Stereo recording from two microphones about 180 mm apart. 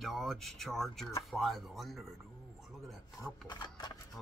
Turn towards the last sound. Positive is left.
turn(degrees=25)  # may be behind; listen again after turning